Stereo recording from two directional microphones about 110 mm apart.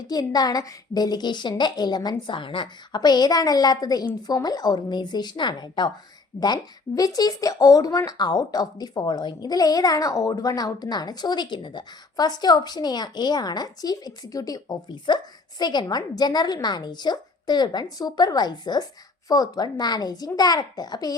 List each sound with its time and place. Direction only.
0.1 s speech: 35° left (ahead or behind)